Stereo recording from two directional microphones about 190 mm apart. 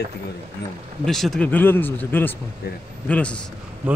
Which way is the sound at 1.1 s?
Centre (ahead or behind).